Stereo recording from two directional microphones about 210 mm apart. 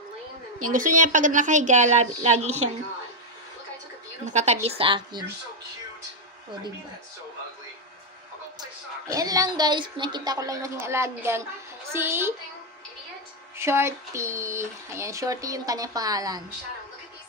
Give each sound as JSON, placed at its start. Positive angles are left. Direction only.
{"t": 0.7, "sound": "a woman's voice", "side_deg": -40}
{"t": 4.3, "sound": "a woman's voice", "side_deg": -30}
{"t": 8.5, "sound": "a woman's voice", "side_deg": -15}
{"t": 13.6, "sound": "a woman's voice", "side_deg": -10}